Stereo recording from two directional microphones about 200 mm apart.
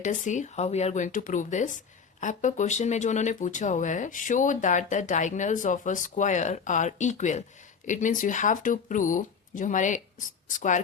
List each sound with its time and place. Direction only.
0.0 s speech: 40° left (ahead or behind)